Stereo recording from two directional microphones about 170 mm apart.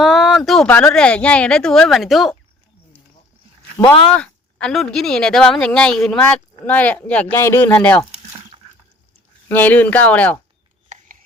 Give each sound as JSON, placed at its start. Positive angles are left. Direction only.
{"t": 0.0, "sound": "speech", "side_deg": 0}
{"t": 4.1, "sound": "speech", "side_deg": 5}
{"t": 9.5, "sound": "speech", "side_deg": 10}
{"t": 10.8, "sound": "a sound", "side_deg": -45}